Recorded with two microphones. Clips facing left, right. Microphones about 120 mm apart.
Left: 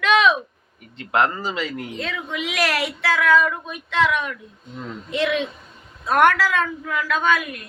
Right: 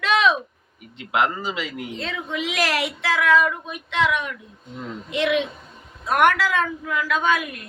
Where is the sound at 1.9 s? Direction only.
30° right (ahead or behind).